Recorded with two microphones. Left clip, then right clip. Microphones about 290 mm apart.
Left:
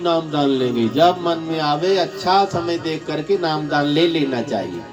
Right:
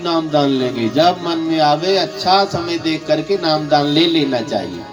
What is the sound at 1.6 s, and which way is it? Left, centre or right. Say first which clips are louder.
Speech: right 1 dB; right.